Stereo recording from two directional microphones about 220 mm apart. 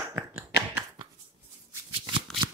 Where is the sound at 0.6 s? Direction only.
15° right (ahead or behind).